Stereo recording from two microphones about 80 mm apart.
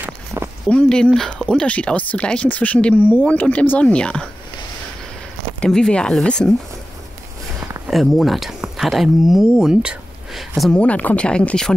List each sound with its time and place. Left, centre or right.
0.7 s speech: centre
5.6 s speech: centre
7.9 s speech: centre
10.7 s speech: centre